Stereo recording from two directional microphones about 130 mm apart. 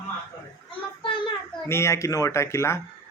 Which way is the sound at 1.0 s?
40° left (ahead or behind).